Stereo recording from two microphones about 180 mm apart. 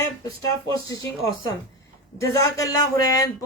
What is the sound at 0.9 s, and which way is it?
Speech, 20° left (ahead or behind).